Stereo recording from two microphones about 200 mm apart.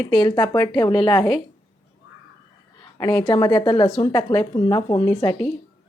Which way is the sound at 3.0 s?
20° left (ahead or behind).